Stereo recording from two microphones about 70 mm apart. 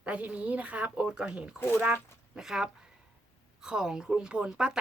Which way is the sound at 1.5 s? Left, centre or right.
Left.